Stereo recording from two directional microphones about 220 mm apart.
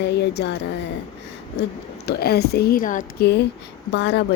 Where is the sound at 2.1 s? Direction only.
45° left (ahead or behind).